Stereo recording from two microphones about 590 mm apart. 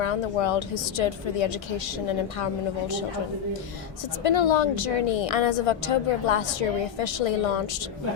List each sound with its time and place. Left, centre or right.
0.0 s a woman's voice: left
4.2 s a woman's voice: left